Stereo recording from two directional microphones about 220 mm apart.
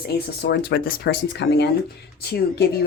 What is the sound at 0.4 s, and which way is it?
Speech, 50° left (ahead or behind).